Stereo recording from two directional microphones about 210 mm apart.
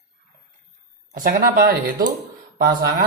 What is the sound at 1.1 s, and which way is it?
Mantra, 40° right (ahead or behind).